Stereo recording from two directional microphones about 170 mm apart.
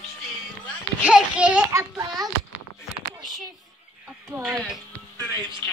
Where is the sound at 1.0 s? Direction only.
5° right (ahead or behind).